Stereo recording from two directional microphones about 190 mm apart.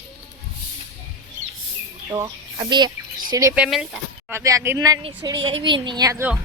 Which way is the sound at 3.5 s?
5° right (ahead or behind).